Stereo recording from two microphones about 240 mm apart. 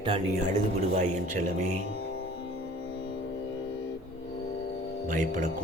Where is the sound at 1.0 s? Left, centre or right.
Right.